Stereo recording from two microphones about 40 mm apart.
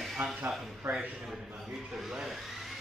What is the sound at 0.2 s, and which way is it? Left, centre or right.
Speech, right.